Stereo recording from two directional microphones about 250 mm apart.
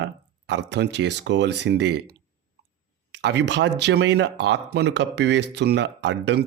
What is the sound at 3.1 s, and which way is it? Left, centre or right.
Speech, right.